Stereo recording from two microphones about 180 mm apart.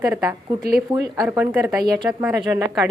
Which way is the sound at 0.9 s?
20° right (ahead or behind).